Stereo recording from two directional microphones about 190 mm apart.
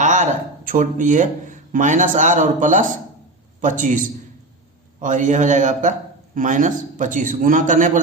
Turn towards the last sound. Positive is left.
turn(degrees=-40)  # may be behind; listen again after turning